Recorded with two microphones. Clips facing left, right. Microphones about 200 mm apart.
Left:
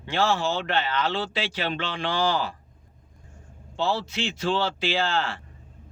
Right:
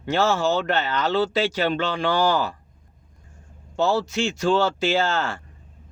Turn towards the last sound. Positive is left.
turn(degrees=-45)  # may be behind; listen again after turning